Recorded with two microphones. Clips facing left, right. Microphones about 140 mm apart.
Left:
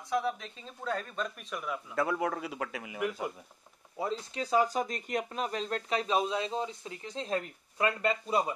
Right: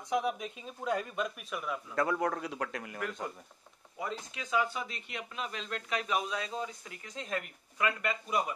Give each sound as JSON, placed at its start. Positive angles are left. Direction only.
{"t": 0.1, "sound": "speech", "side_deg": -15}
{"t": 1.6, "sound": "a man's voice", "side_deg": 0}
{"t": 4.0, "sound": "speech", "side_deg": 35}